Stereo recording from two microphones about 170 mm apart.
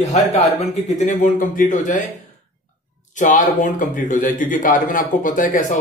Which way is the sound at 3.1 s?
50° left (ahead or behind).